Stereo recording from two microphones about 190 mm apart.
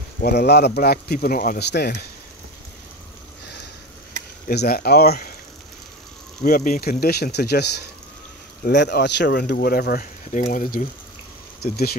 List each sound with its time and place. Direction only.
0.2 s speech: 60° left (ahead or behind)
4.5 s speech: 50° left (ahead or behind)
6.4 s speech: 45° left (ahead or behind)